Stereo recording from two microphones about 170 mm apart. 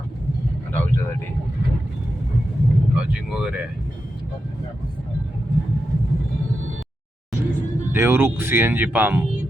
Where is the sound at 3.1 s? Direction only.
5° right (ahead or behind).